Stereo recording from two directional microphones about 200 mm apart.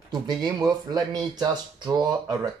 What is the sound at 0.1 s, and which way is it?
Speech, 20° right (ahead or behind).